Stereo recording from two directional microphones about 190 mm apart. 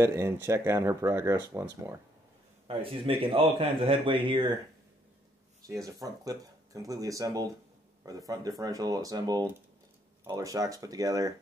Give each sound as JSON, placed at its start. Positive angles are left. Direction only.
{"t": 0.0, "sound": "speech", "side_deg": -15}
{"t": 2.7, "sound": "speech", "side_deg": -30}
{"t": 5.9, "sound": "speech", "side_deg": -20}